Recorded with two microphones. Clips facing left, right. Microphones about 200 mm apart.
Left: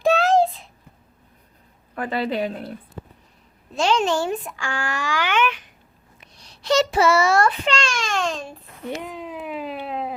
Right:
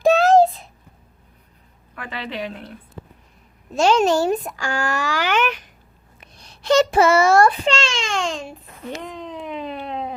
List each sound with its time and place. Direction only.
0.0 s a sound: 40° right (ahead or behind)
2.0 s a woman's voice: 40° left (ahead or behind)
3.8 s a child's voice: 45° right (ahead or behind)
6.1 s a child's voice: 55° right (ahead or behind)
7.7 s a child's voice: 25° right (ahead or behind)
9.0 s a sound: 5° left (ahead or behind)